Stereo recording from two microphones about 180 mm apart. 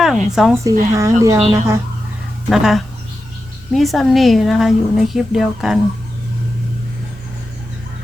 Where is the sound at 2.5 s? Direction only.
Centre (ahead or behind).